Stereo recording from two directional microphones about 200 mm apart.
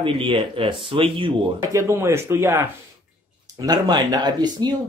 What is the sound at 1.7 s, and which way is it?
Speech, 15° right (ahead or behind).